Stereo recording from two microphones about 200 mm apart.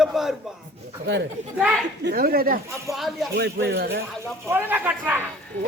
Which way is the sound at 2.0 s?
50° right (ahead or behind).